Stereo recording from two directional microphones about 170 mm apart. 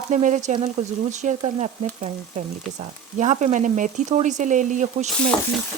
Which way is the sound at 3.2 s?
45° right (ahead or behind).